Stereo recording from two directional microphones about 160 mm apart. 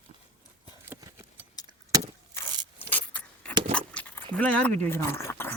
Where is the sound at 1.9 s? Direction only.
20° right (ahead or behind).